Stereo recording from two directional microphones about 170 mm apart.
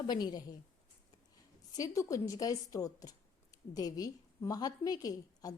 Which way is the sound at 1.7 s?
20° left (ahead or behind).